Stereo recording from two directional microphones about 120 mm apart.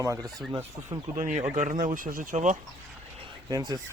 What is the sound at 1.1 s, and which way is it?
Speech, 90° right.